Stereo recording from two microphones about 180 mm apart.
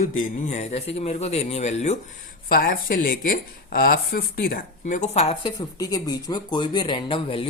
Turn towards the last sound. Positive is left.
turn(degrees=30)  # may be behind; listen again after turning